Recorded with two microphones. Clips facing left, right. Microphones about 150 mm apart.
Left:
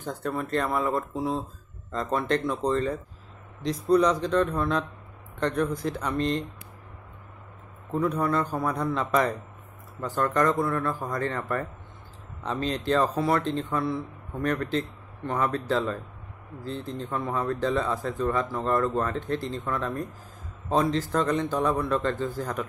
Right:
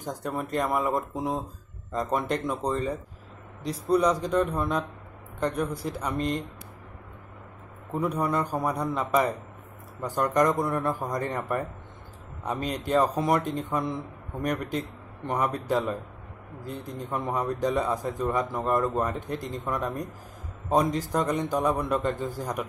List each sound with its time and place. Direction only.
0.0 s speech: 10° right (ahead or behind)
7.9 s a man's voice: 10° right (ahead or behind)